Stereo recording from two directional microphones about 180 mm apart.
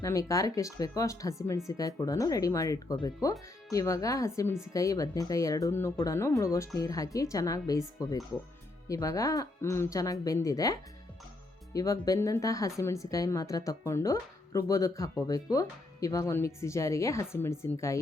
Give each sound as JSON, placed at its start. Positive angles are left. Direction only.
{"t": 0.0, "sound": "speech", "side_deg": 15}